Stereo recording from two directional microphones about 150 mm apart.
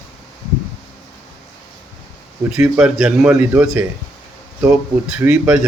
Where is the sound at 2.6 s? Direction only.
15° right (ahead or behind).